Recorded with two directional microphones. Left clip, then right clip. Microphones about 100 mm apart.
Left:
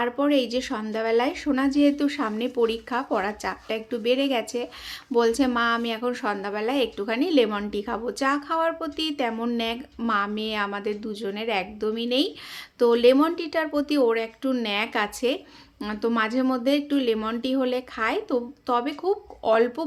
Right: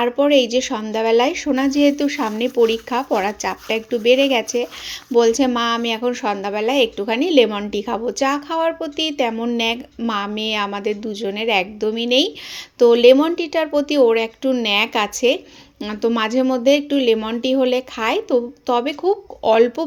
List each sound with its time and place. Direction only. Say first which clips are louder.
0.0 s speech: right 8 dB; 25° right (ahead or behind)